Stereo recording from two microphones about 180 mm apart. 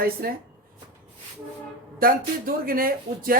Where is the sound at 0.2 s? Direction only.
55° right (ahead or behind).